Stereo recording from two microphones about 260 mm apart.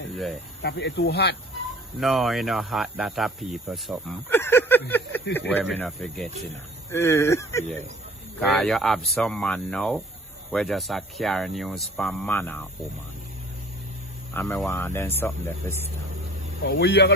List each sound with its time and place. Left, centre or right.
0.1 s speech: centre
0.6 s speech: left
2.0 s speech: centre
14.3 s speech: centre
16.6 s speech: left